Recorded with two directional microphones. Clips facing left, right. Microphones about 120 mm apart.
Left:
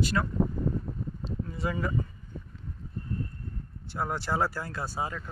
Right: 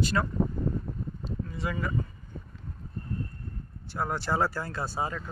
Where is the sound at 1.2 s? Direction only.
25° left (ahead or behind).